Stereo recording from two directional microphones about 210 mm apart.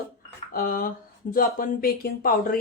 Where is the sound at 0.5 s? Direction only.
45° left (ahead or behind).